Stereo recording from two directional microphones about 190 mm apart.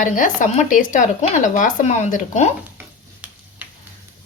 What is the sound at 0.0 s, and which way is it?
A woman's voice, 40° left (ahead or behind).